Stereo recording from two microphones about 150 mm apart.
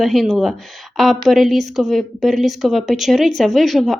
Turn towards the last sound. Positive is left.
turn(degrees=0)  # may be behind; listen again after turning